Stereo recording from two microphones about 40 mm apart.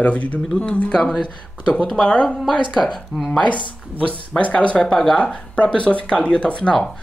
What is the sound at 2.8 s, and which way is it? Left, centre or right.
Speech, centre.